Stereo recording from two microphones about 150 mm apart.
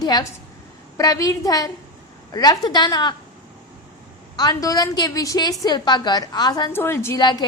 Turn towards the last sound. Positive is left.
turn(degrees=30)  # may be behind; listen again after turning